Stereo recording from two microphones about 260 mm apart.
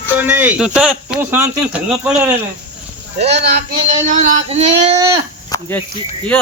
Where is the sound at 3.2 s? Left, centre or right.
Right.